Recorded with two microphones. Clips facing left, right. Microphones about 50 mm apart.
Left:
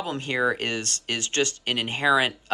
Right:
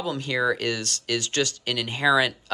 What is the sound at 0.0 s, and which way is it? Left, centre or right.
Speech, left.